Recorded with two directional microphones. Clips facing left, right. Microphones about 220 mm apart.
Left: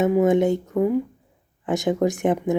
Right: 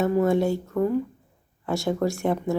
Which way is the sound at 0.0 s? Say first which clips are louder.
Left 3 dB; 15° left (ahead or behind).